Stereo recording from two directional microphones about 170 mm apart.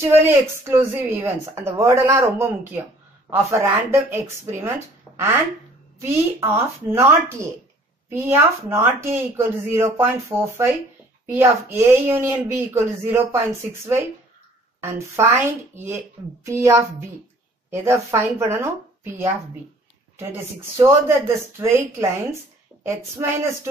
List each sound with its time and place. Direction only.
0.0 s speech: 15° right (ahead or behind)
21.5 s speech: 15° right (ahead or behind)